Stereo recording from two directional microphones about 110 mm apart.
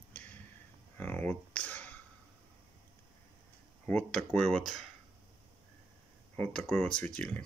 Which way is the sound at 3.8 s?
10° left (ahead or behind).